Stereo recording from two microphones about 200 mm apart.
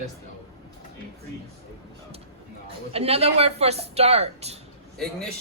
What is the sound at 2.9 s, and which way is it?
Speech, 30° right (ahead or behind).